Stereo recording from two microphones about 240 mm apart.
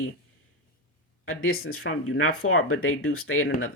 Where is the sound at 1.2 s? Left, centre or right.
Left.